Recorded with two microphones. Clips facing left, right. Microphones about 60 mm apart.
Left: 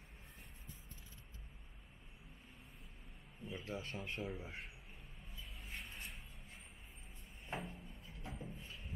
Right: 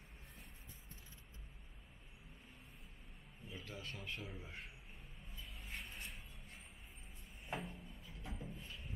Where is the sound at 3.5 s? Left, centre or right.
Left.